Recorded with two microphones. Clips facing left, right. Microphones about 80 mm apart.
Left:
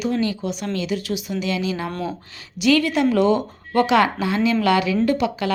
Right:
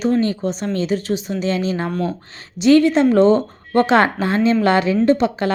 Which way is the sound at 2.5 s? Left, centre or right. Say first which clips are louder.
Right 6 dB; right.